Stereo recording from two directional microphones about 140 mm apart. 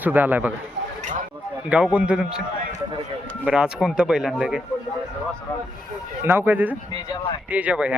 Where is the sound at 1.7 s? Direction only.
10° right (ahead or behind).